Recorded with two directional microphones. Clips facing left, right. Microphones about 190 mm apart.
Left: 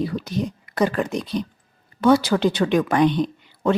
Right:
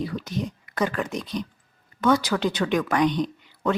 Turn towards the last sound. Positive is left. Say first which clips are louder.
# left 4 dB
turn(degrees=30)  # may be behind; listen again after turning